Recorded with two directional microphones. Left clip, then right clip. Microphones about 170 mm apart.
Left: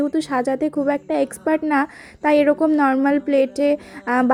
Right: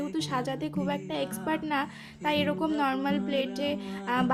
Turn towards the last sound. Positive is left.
turn(degrees=35)  # may be behind; listen again after turning